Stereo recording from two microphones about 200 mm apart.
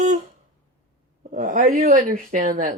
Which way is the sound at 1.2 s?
40° right (ahead or behind).